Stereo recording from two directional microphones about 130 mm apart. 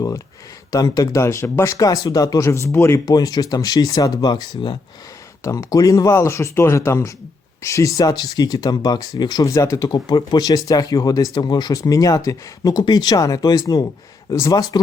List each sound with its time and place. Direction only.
0.7 s speech: 30° left (ahead or behind)
3.1 s speech: 30° left (ahead or behind)
5.4 s speech: 25° left (ahead or behind)